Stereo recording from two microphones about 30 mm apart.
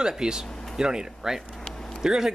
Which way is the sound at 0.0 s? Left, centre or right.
Right.